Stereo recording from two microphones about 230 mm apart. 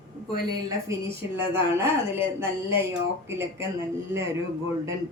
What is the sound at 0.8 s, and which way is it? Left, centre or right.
A woman's voice, centre.